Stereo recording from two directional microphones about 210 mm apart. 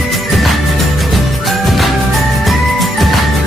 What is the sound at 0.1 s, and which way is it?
Music, centre (ahead or behind).